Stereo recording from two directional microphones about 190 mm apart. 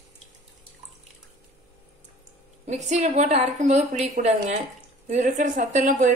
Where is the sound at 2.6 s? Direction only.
35° right (ahead or behind).